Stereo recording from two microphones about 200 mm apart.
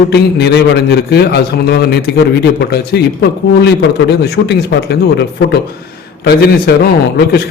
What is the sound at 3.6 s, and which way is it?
A man's voice, 55° left (ahead or behind).